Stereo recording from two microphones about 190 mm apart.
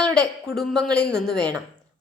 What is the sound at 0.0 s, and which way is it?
A woman's voice, 5° left (ahead or behind).